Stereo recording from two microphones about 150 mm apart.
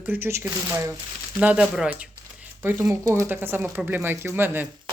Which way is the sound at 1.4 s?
5° right (ahead or behind).